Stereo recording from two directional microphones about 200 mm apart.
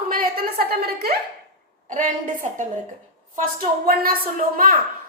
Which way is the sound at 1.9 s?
40° right (ahead or behind).